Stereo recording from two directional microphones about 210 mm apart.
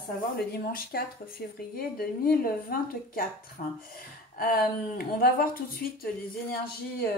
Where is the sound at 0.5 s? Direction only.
45° left (ahead or behind).